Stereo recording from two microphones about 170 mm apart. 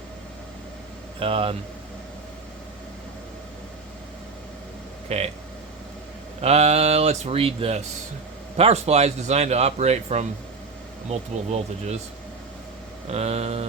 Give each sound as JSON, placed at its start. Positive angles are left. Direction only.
{"t": 1.2, "sound": "a man's voice", "side_deg": -35}
{"t": 5.0, "sound": "speech", "side_deg": -40}
{"t": 6.4, "sound": "a man's voice", "side_deg": -40}
{"t": 13.1, "sound": "a man's voice", "side_deg": -40}